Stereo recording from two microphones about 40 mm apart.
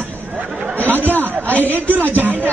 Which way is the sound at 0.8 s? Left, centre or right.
Left.